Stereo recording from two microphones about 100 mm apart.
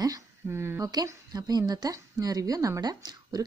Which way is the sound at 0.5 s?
25° right (ahead or behind).